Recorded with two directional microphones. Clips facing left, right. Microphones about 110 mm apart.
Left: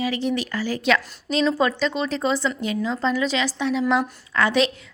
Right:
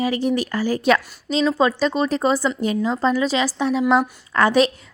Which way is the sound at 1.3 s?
Centre (ahead or behind).